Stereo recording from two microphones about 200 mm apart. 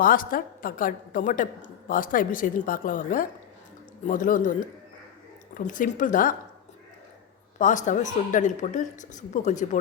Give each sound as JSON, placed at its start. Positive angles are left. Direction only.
{"t": 0.0, "sound": "a woman's voice", "side_deg": 45}
{"t": 5.5, "sound": "speech", "side_deg": 40}
{"t": 7.6, "sound": "speech", "side_deg": 40}